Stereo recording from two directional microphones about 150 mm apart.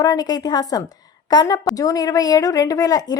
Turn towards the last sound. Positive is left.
turn(degrees=25)  # may be behind; listen again after turning